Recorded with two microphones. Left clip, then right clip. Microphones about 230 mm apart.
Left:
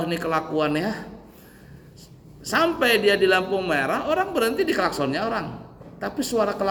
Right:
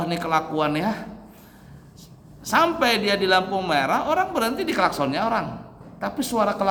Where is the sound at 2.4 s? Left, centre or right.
Centre.